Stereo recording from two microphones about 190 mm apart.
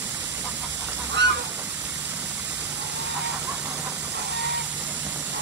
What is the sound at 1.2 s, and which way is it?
Goose, 65° right (ahead or behind).